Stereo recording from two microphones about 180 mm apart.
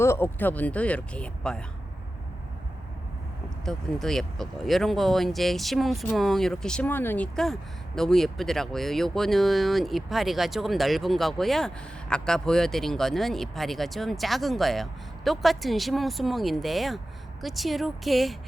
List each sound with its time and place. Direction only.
0.0 s speech: 15° left (ahead or behind)
3.7 s speech: centre (ahead or behind)